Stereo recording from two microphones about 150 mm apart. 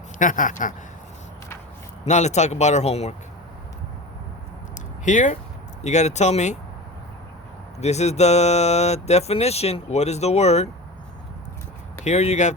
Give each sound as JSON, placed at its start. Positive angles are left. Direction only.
{"t": 0.2, "sound": "speech", "side_deg": 60}
{"t": 2.0, "sound": "speech", "side_deg": 50}
{"t": 5.0, "sound": "speech", "side_deg": 55}
{"t": 7.8, "sound": "speech", "side_deg": 45}
{"t": 12.0, "sound": "speech", "side_deg": 50}